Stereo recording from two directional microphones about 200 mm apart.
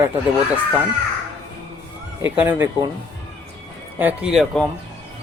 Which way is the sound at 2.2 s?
10° right (ahead or behind).